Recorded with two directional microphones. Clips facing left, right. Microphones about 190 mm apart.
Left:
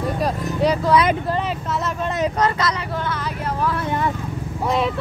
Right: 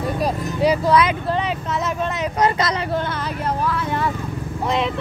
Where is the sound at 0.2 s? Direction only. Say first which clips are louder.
Right 1 dB; 5° right (ahead or behind).